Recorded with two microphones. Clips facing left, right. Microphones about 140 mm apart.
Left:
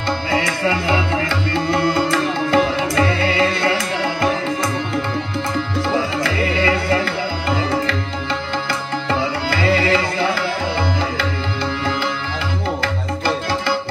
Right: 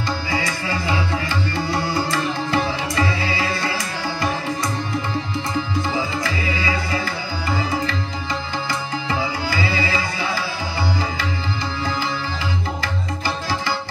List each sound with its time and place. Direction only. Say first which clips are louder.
0.3 s music: left 8 dB; 60° left (ahead or behind)
5.9 s music: left 4 dB; 55° left (ahead or behind)
9.5 s music: left 9 dB; 60° left (ahead or behind)
12.8 s tabla: left 4 dB; 55° left (ahead or behind)